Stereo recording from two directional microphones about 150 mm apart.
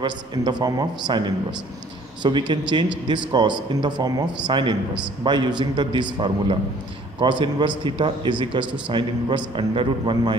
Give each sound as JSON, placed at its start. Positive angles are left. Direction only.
{"t": 0.0, "sound": "a man's voice", "side_deg": -30}